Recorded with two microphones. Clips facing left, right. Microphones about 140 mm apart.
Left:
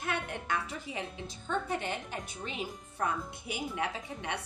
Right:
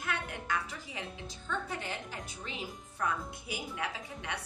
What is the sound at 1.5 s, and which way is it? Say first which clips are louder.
Speech: left 4 dB; 20° left (ahead or behind).